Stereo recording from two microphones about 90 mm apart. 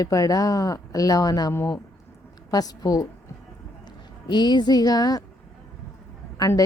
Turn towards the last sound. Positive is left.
turn(degrees=40)  # may be behind; listen again after turning